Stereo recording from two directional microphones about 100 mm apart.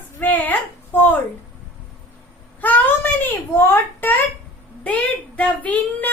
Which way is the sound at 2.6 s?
20° left (ahead or behind).